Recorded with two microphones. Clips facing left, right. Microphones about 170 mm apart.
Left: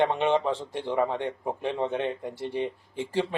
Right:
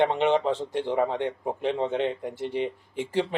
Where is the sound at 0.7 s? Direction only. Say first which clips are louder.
Right 1 dB; 15° right (ahead or behind).